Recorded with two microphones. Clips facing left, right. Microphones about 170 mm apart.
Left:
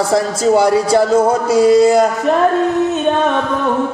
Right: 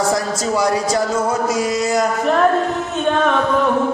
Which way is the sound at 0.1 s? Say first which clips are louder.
Left 6 dB; 30° left (ahead or behind).